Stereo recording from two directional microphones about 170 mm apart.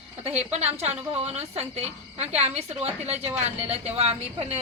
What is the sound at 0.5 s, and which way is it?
A woman's voice, 40° right (ahead or behind).